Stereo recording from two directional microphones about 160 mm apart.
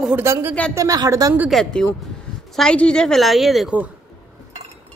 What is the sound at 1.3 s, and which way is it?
Speech, 5° right (ahead or behind).